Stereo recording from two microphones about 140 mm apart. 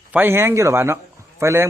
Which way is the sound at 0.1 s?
15° right (ahead or behind).